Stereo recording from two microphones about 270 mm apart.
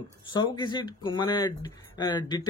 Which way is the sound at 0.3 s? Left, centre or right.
Centre.